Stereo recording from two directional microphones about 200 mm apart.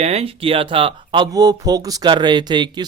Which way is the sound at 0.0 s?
30° right (ahead or behind).